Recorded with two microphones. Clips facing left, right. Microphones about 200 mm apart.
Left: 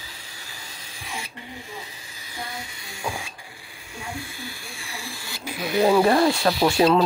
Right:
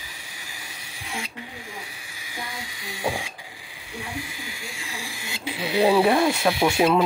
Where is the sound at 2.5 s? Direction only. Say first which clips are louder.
Even; 90° right.